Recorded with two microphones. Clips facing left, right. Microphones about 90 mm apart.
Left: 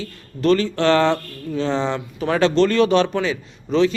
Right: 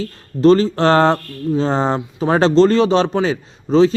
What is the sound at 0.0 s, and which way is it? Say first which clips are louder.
Speech: right 8 dB; 35° right (ahead or behind).